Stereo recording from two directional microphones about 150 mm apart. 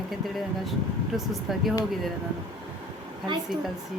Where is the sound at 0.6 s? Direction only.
Centre (ahead or behind).